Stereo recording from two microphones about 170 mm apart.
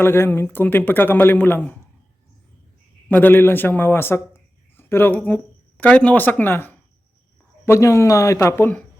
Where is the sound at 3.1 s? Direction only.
10° left (ahead or behind).